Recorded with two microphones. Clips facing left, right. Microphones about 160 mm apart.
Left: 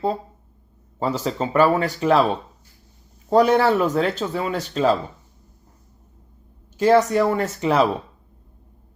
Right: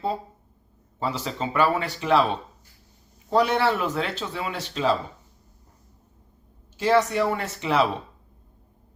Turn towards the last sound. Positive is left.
turn(degrees=40)  # may be behind; listen again after turning